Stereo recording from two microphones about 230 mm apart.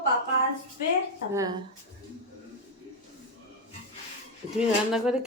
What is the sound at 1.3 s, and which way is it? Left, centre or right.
Speech, centre.